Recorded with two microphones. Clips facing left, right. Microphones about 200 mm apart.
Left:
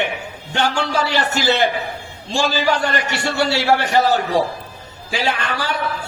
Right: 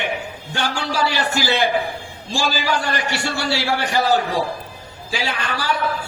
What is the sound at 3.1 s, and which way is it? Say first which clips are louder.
Speech: left 3 dB; 20° left (ahead or behind).